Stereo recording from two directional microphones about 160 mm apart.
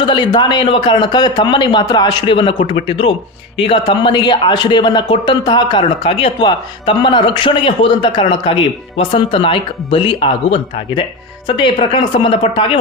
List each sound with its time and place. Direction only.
0.0 s a man's voice: 30° left (ahead or behind)